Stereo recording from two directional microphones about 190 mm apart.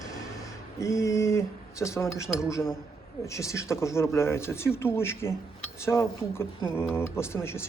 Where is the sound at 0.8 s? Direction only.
15° left (ahead or behind).